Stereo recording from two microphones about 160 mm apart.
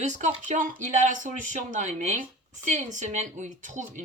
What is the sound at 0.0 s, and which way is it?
Speech, 50° right (ahead or behind).